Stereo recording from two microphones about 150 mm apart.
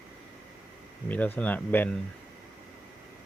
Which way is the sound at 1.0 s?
10° left (ahead or behind).